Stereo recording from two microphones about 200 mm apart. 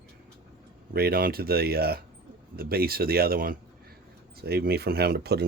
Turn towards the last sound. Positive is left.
turn(degrees=-55)  # may be behind; listen again after turning